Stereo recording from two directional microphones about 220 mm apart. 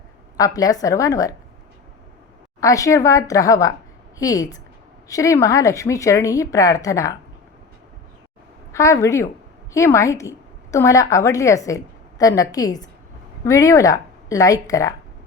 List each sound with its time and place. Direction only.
0.3 s speech: 15° left (ahead or behind)
2.6 s speech: 15° left (ahead or behind)
8.7 s a woman's voice: 15° left (ahead or behind)